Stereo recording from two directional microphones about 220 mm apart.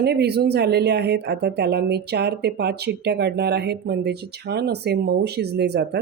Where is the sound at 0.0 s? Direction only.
50° right (ahead or behind).